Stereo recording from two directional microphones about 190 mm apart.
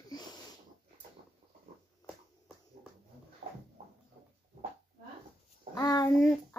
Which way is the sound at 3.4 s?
30° right (ahead or behind).